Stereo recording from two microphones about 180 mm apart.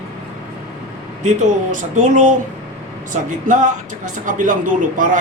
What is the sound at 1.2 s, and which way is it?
Speech, 40° right (ahead or behind).